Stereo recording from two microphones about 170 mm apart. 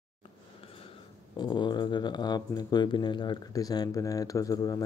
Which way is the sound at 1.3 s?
25° left (ahead or behind).